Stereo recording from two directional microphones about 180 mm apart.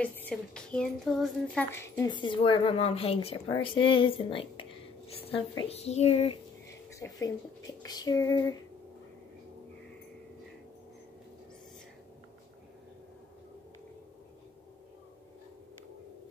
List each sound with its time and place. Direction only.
0.0 s speech: 10° left (ahead or behind)
1.8 s a woman's voice: 15° left (ahead or behind)
2.1 s a woman's voice: 25° left (ahead or behind)
7.0 s speech: 20° left (ahead or behind)